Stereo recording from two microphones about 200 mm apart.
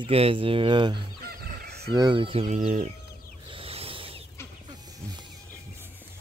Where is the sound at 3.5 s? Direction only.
30° right (ahead or behind).